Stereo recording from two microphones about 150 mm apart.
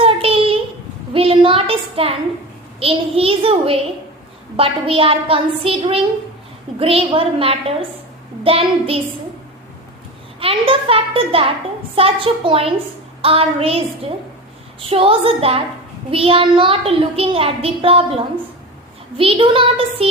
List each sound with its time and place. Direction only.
0.0 s child singing: 40° right (ahead or behind)
1.1 s a sound: 40° right (ahead or behind)
2.8 s a child's voice: 40° right (ahead or behind)
10.4 s a child's voice: 40° right (ahead or behind)